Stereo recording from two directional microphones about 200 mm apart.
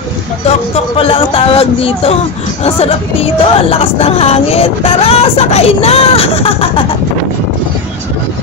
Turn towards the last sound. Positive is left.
turn(degrees=30)  # may be behind; listen again after turning